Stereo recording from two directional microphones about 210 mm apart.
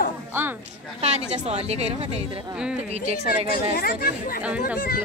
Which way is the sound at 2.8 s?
30° right (ahead or behind).